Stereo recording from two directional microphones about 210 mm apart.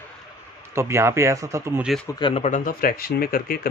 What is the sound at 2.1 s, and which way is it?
Speech, 25° left (ahead or behind).